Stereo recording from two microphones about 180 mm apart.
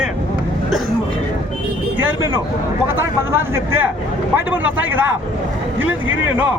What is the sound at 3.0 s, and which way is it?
Speech, 10° right (ahead or behind).